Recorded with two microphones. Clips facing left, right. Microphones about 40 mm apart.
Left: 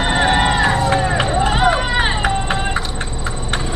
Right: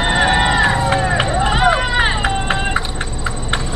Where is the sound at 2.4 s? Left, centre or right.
Centre.